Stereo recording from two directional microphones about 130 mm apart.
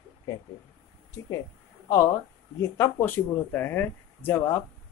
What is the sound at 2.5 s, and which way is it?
Speech, 20° left (ahead or behind).